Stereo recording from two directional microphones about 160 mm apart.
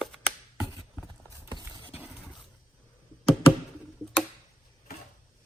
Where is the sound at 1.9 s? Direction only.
10° right (ahead or behind).